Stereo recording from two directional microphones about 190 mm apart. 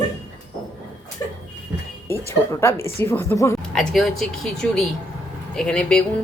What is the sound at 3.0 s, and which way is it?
Speech, 15° left (ahead or behind).